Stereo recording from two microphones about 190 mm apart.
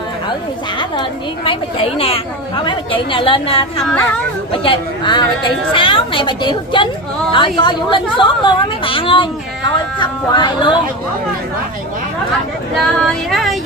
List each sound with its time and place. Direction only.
0.7 s a woman's voice: 25° left (ahead or behind)
12.7 s music: centre (ahead or behind)